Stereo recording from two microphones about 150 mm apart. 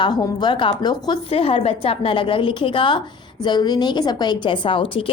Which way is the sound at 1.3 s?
40° left (ahead or behind).